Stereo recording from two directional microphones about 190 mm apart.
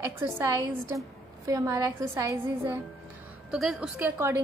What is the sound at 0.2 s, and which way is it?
A woman's voice, 15° right (ahead or behind).